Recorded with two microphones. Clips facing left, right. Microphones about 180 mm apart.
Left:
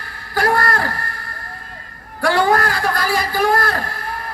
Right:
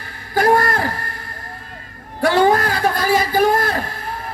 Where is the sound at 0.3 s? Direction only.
20° right (ahead or behind).